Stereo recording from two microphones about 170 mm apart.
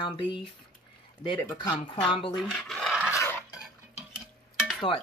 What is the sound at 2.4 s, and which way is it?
Speech, centre (ahead or behind).